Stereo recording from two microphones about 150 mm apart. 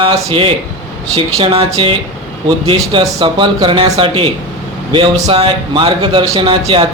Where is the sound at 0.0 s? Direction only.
40° right (ahead or behind).